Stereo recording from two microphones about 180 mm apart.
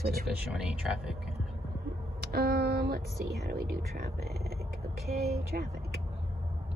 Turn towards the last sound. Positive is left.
turn(degrees=-60)  # may be behind; listen again after turning